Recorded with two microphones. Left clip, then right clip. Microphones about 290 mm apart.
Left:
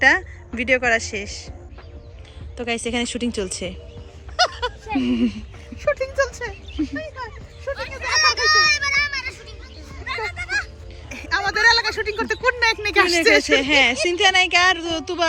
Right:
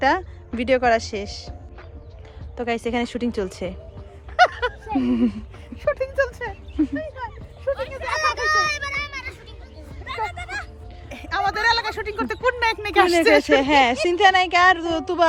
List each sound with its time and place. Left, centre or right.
0.0 s speech: centre
2.6 s a woman's voice: centre
4.4 s a sound: right
4.9 s a woman's voice: centre
5.7 s a sound: right
7.8 s a sound: right
10.1 s music: right
11.1 s speech: right
13.5 s a woman's voice: centre